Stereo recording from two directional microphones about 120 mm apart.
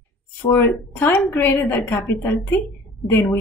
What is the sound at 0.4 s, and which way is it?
Speech, 15° left (ahead or behind).